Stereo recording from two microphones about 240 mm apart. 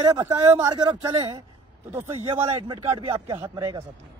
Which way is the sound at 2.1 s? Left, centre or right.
Right.